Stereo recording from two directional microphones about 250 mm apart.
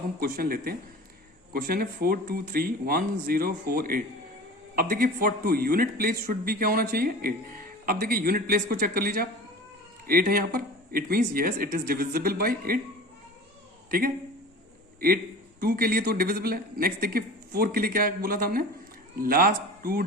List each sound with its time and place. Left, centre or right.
0.2 s a man's voice: right
15.6 s a man's voice: right